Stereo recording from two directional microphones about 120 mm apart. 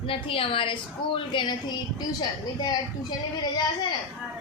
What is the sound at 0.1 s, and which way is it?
A woman's voice, 50° left (ahead or behind).